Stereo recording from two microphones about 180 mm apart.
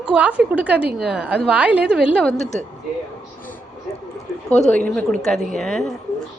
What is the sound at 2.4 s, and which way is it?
Speech, 40° left (ahead or behind).